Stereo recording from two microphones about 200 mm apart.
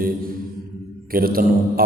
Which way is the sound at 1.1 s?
45° right (ahead or behind).